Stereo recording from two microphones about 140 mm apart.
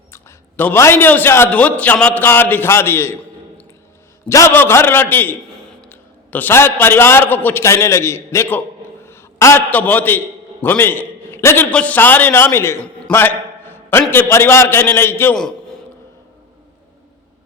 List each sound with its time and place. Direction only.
0.1 s a man's voice: 15° left (ahead or behind)
4.3 s a man's voice: 20° left (ahead or behind)